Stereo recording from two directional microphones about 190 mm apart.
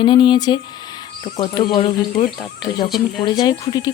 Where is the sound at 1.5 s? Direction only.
25° left (ahead or behind).